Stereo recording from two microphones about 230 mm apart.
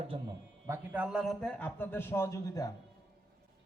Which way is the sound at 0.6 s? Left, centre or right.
Centre.